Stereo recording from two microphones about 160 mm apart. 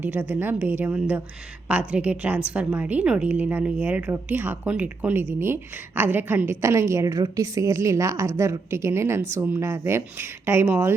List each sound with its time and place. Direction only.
0.0 s a woman's voice: 10° right (ahead or behind)